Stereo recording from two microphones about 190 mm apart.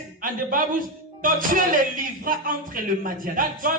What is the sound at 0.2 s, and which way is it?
A man's voice, 45° right (ahead or behind).